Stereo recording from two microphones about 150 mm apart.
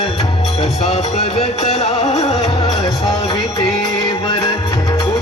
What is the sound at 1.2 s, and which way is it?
Music, 45° left (ahead or behind).